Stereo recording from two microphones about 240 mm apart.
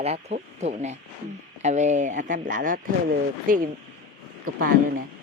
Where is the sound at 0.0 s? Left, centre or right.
Right.